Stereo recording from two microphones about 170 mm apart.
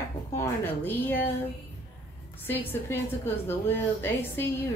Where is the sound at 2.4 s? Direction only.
10° left (ahead or behind).